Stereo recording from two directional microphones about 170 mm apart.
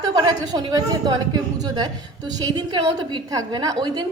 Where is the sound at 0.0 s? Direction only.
25° right (ahead or behind).